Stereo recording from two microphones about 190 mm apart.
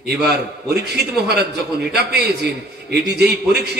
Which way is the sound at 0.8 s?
60° right (ahead or behind).